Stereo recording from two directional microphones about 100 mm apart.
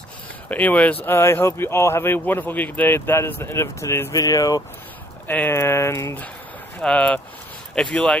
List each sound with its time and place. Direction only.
0.5 s speech: 15° left (ahead or behind); by 4.6 s 35° left (ahead or behind)
5.3 s speech: 20° left (ahead or behind)
6.8 s speech: 10° left (ahead or behind)